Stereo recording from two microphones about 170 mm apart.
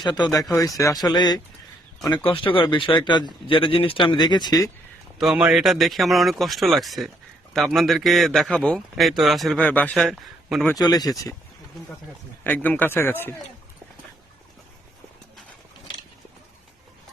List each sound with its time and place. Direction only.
0.0 s speech: 25° left (ahead or behind)
5.1 s a man's voice: 5° right (ahead or behind)
10.8 s speech: 25° left (ahead or behind)
12.4 s speech: 10° left (ahead or behind)